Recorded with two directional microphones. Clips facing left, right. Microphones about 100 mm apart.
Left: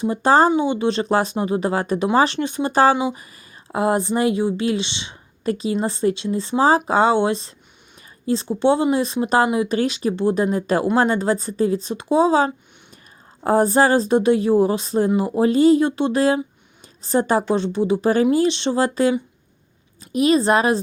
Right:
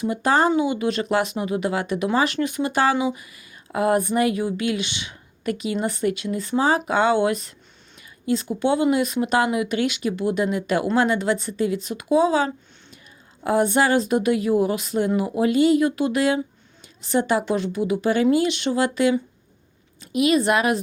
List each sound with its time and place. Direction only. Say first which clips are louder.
0.0 s a woman's voice: left 4 dB; 30° left (ahead or behind)